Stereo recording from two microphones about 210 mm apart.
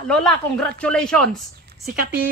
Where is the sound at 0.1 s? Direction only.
5° left (ahead or behind).